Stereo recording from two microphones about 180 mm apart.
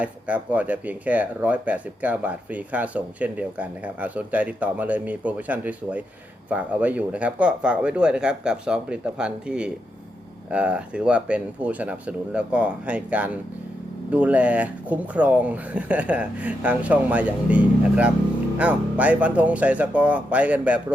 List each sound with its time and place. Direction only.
0.0 s speech: 10° right (ahead or behind)